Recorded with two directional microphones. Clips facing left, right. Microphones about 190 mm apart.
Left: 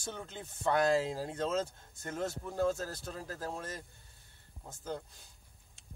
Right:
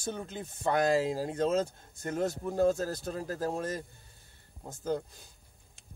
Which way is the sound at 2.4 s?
45° right (ahead or behind).